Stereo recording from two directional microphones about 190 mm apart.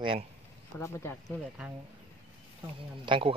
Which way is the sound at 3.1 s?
30° right (ahead or behind).